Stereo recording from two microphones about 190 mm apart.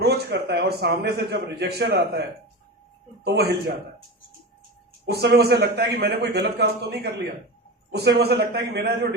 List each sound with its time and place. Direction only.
0.0 s a man's voice: 60° right (ahead or behind)
3.2 s a man's voice: 55° right (ahead or behind)
5.0 s a man's voice: 60° right (ahead or behind)